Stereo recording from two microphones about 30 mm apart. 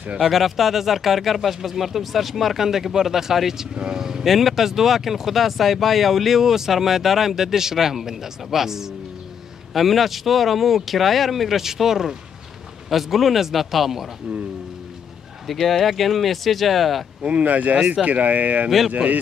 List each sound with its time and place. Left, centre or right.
0.2 s speech: centre
3.9 s vehicle: centre
4.2 s speech: centre
15.4 s speech: centre
17.2 s speech: right